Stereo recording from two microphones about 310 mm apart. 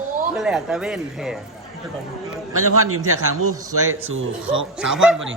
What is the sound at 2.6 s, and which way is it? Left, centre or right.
A man's voice, right.